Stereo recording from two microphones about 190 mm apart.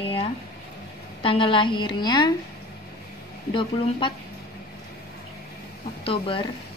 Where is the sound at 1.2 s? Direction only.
25° left (ahead or behind).